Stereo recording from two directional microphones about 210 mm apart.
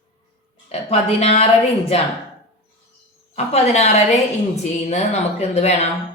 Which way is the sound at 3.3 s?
30° left (ahead or behind).